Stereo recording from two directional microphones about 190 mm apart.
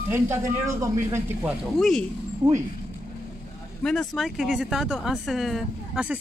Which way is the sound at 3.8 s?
5° left (ahead or behind).